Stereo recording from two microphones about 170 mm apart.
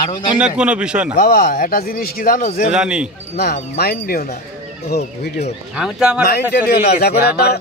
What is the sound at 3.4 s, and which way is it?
Speech, 65° left (ahead or behind).